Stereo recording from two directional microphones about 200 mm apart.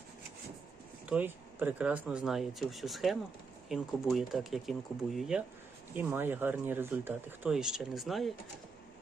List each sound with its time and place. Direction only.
1.0 s speech: 5° right (ahead or behind)